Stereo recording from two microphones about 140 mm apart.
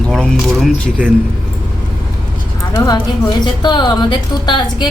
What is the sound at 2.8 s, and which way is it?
A woman's voice, 30° left (ahead or behind).